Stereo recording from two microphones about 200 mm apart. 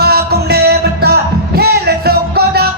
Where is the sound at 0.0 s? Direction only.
55° right (ahead or behind).